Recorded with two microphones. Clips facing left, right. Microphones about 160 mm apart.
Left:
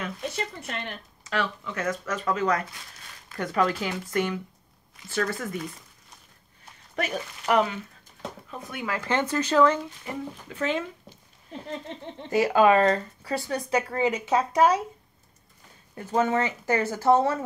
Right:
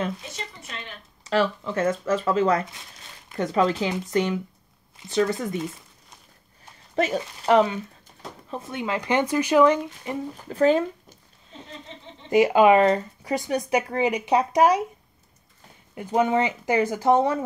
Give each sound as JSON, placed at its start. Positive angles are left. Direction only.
{"t": 0.6, "sound": "speech", "side_deg": 60}
{"t": 1.2, "sound": "speech", "side_deg": -35}
{"t": 7.0, "sound": "speech", "side_deg": -25}
{"t": 10.5, "sound": "speech", "side_deg": -40}
{"t": 12.3, "sound": "speech", "side_deg": -20}
{"t": 15.9, "sound": "speech", "side_deg": -15}